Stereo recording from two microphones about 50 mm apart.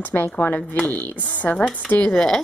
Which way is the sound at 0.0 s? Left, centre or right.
Left.